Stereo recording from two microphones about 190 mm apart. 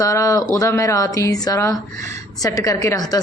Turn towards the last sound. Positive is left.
turn(degrees=20)  # may be behind; listen again after turning